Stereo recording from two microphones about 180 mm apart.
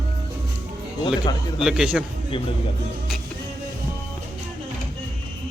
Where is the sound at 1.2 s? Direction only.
25° left (ahead or behind).